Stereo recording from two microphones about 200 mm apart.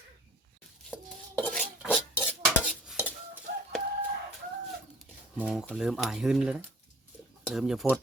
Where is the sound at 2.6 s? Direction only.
5° right (ahead or behind).